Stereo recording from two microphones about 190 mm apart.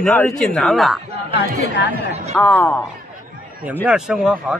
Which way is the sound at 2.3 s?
10° left (ahead or behind).